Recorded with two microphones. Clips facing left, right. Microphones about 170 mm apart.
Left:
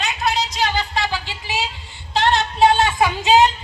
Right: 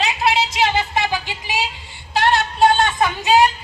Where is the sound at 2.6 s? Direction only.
5° left (ahead or behind).